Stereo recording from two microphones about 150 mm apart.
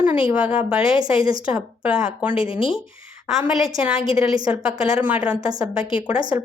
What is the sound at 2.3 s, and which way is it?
Speech, 35° left (ahead or behind).